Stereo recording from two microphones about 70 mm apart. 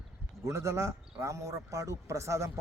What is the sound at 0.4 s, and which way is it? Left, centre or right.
A man's voice, right.